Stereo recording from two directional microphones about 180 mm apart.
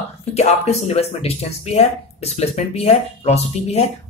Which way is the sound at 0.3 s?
35° left (ahead or behind).